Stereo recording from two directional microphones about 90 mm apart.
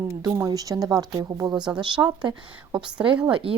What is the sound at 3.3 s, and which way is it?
Speech, 90° right.